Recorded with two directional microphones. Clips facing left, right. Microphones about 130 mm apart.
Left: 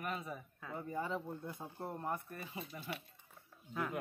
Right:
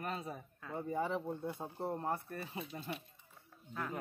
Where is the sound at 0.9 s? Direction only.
15° right (ahead or behind).